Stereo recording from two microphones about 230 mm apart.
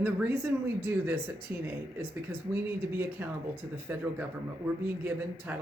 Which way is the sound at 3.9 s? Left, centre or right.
Centre.